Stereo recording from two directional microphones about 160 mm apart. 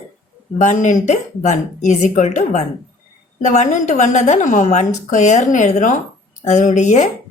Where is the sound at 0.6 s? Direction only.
50° left (ahead or behind).